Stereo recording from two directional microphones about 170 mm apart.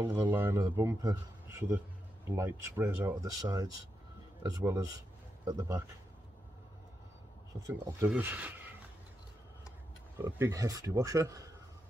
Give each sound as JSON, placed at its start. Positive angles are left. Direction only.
{"t": 0.0, "sound": "speech", "side_deg": -25}
{"t": 8.2, "sound": "speech", "side_deg": -10}
{"t": 10.1, "sound": "speech", "side_deg": -15}